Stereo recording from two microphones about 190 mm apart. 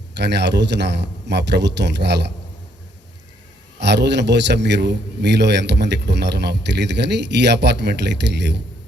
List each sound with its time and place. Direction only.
0.2 s a man's voice: 65° right (ahead or behind)
3.8 s a man's voice: 65° right (ahead or behind)